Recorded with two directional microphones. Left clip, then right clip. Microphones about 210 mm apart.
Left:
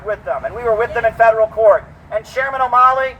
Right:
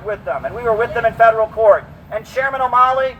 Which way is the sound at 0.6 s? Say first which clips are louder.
Left 1 dB; 20° left (ahead or behind).